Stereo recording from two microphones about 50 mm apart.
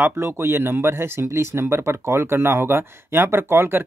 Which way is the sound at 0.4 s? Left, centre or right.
Right.